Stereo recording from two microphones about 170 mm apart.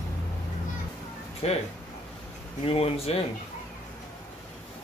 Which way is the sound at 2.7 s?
35° left (ahead or behind).